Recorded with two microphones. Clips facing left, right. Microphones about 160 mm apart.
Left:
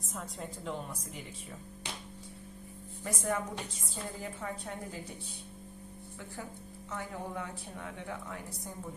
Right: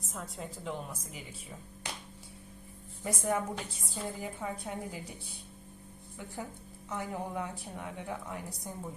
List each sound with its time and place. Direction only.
0.1 s a woman's voice: centre (ahead or behind)
3.0 s a woman's voice: 10° right (ahead or behind)
6.9 s a woman's voice: 15° right (ahead or behind)